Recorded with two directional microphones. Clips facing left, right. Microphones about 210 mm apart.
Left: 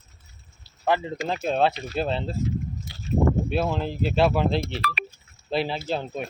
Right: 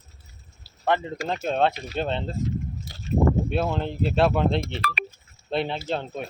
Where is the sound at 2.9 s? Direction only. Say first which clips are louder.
Left 1 dB; 45° right (ahead or behind).